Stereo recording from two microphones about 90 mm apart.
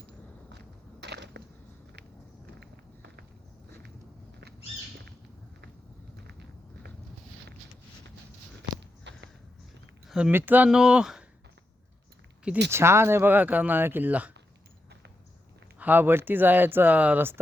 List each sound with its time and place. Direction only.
10.1 s a sound: 10° right (ahead or behind)
10.3 s speech: 20° right (ahead or behind)
10.7 s speech: 5° right (ahead or behind)
12.7 s speech: 30° right (ahead or behind)
15.8 s speech: 20° right (ahead or behind)